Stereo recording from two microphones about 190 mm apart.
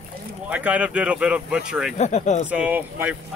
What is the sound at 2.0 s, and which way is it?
Speech, 40° left (ahead or behind).